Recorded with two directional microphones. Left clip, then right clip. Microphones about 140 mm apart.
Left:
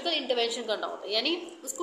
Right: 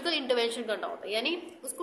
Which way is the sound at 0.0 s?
30° right (ahead or behind).